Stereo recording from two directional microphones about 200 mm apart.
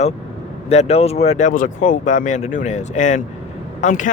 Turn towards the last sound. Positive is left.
turn(degrees=40)  # may be behind; listen again after turning